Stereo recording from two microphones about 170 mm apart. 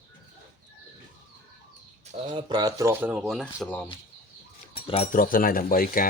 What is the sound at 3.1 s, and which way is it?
Speech, centre (ahead or behind).